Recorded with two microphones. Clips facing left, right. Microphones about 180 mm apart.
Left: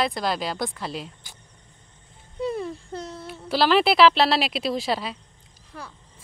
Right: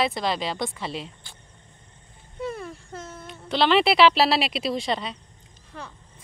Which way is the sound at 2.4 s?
20° left (ahead or behind).